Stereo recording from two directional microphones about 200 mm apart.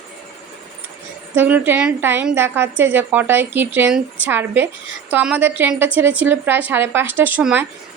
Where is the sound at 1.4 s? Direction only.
10° right (ahead or behind).